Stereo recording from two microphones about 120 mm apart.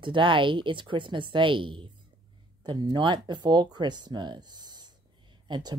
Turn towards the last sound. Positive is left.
turn(degrees=-35)  # may be behind; listen again after turning